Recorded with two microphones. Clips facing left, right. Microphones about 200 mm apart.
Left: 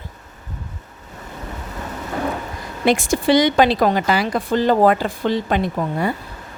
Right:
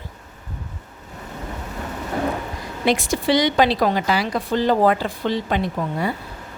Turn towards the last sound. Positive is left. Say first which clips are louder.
# left 2 dB
turn(degrees=50)  # may be behind; listen again after turning